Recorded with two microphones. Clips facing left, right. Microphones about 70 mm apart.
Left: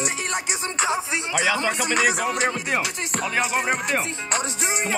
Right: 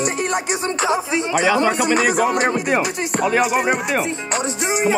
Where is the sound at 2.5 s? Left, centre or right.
Centre.